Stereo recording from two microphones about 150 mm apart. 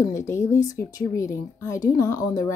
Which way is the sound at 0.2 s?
20° left (ahead or behind).